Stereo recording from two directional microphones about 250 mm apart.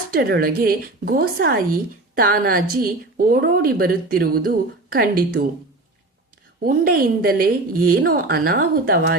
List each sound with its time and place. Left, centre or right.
0.1 s speech: right
6.6 s speech: right